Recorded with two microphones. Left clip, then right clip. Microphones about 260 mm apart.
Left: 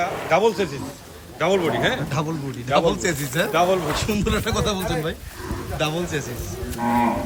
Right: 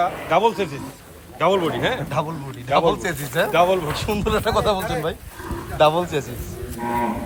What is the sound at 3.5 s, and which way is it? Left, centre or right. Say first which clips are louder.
Speech: right 2 dB; right.